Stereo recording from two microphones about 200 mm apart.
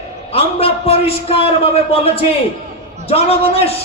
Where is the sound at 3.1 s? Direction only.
30° left (ahead or behind).